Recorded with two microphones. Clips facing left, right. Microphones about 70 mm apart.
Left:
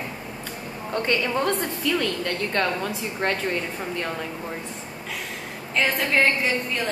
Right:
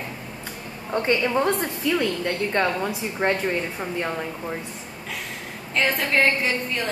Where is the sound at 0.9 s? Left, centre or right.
Centre.